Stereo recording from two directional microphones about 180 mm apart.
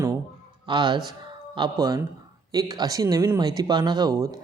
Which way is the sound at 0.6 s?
25° right (ahead or behind).